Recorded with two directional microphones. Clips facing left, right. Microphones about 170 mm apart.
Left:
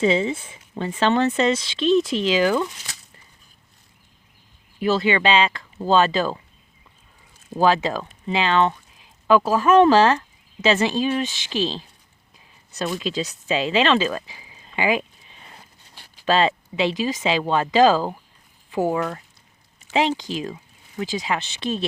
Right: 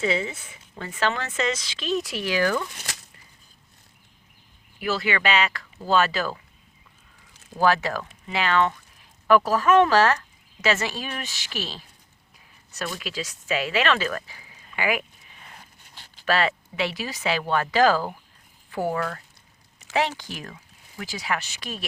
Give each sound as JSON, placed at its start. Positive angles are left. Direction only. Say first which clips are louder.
{"t": 0.0, "sound": "speech", "louder": "left 6 dB", "side_deg": 25}
{"t": 4.8, "sound": "speech", "louder": "left 6 dB", "side_deg": 25}
{"t": 7.5, "sound": "speech", "louder": "left 3 dB", "side_deg": 20}